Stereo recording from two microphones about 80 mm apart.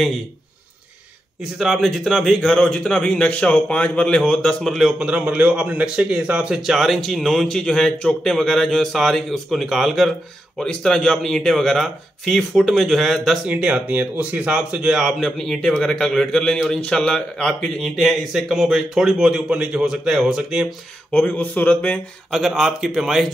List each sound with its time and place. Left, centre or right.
1.6 s a man's voice: centre
13.5 s a man's voice: centre
21.3 s a man's voice: left
22.3 s a man's voice: centre